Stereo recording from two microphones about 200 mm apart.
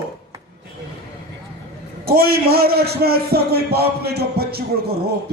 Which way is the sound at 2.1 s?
50° right (ahead or behind).